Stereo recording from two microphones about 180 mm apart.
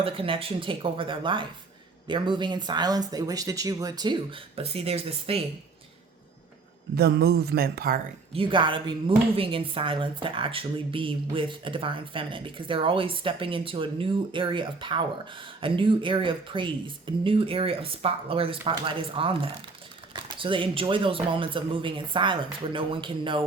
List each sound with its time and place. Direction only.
0.0 s speech: 30° right (ahead or behind)
6.9 s speech: 60° right (ahead or behind)
8.3 s speech: 30° right (ahead or behind)